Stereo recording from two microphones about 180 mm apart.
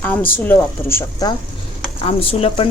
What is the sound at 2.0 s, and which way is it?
Speech, 30° left (ahead or behind).